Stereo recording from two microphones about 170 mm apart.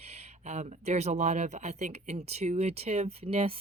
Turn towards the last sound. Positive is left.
turn(degrees=-35)  # may be behind; listen again after turning